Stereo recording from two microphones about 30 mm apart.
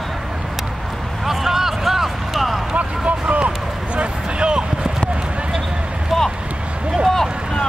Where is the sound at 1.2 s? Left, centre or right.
Centre.